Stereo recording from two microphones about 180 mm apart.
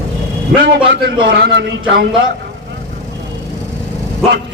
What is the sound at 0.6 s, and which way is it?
A man's voice, 60° right (ahead or behind).